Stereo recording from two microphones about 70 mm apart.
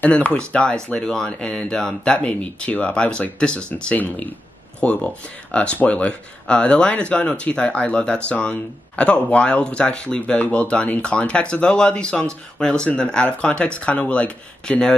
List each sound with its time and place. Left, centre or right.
0.1 s speech: centre